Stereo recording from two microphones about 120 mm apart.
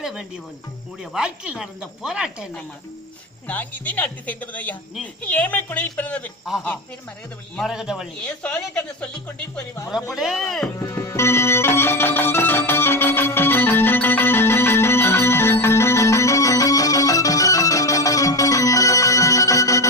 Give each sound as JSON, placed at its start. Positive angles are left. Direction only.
{"t": 0.0, "sound": "speech", "side_deg": -5}
{"t": 3.4, "sound": "speech", "side_deg": 15}
{"t": 7.5, "sound": "speech", "side_deg": 0}
{"t": 8.2, "sound": "speech", "side_deg": 10}
{"t": 10.1, "sound": "speech", "side_deg": 0}
{"t": 10.8, "sound": "music", "side_deg": 25}